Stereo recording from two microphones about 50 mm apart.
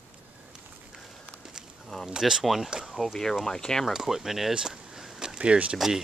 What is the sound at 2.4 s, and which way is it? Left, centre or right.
Speech, centre.